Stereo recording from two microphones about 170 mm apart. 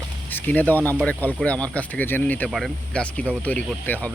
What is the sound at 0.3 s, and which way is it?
Speech, 10° left (ahead or behind).